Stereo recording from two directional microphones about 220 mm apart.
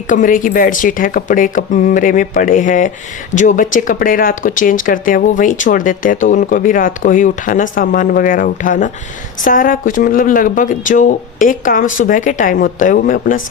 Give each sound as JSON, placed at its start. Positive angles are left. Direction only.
{"t": 0.1, "sound": "speech", "side_deg": 35}